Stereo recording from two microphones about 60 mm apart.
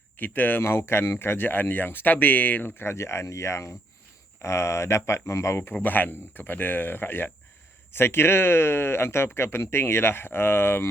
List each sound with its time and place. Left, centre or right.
0.2 s speech: left
5.7 s speech: left